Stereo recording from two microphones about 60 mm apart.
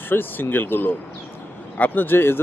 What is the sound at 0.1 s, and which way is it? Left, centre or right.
Speech, left.